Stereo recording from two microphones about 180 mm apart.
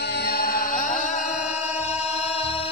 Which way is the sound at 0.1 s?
60° left (ahead or behind).